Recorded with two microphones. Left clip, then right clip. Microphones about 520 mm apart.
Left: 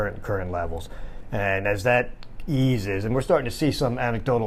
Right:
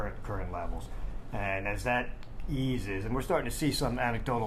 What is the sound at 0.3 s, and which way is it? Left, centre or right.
Speech, left.